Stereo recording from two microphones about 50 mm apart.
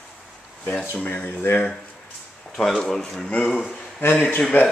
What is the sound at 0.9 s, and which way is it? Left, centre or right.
Speech, left.